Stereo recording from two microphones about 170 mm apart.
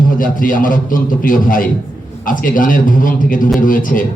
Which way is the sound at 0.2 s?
55° left (ahead or behind).